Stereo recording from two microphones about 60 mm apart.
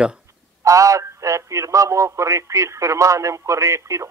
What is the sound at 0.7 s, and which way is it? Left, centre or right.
Speech, right.